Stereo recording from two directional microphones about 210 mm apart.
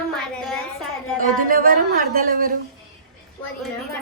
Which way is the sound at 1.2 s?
40° right (ahead or behind).